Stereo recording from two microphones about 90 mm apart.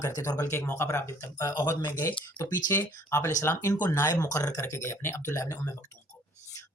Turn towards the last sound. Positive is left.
turn(degrees=35)  # may be behind; listen again after turning